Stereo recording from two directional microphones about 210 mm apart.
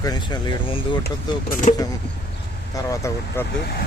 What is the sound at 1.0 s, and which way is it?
Speech, 40° left (ahead or behind).